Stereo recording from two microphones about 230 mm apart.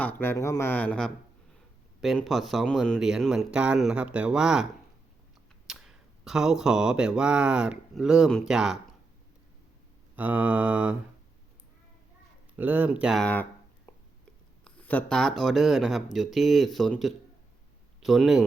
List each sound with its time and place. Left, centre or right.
0.0 s speech: centre
5.6 s speech: centre
10.2 s speech: centre
12.5 s speech: centre